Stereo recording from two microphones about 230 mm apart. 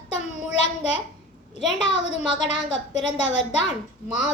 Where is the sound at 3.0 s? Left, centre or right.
Centre.